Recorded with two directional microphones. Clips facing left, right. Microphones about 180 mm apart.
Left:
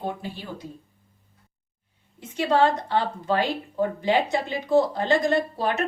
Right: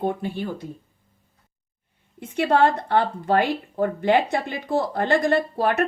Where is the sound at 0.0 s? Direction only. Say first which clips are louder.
Right 6 dB; 55° right (ahead or behind).